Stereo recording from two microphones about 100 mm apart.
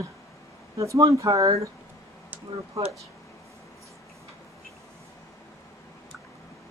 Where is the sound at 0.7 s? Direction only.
30° right (ahead or behind).